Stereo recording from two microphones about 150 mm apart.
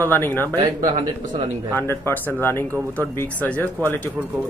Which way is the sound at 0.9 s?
40° right (ahead or behind).